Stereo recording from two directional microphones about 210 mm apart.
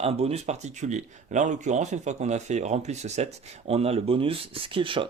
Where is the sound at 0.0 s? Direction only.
30° right (ahead or behind).